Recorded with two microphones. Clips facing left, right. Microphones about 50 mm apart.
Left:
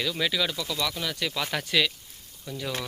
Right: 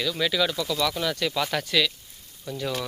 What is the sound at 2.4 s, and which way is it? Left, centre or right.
Speech, centre.